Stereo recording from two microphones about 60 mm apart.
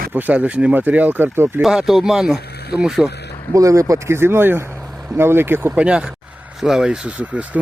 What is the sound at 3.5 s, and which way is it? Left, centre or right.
Speech, right.